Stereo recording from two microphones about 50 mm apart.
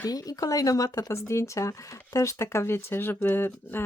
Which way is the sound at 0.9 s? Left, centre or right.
Left.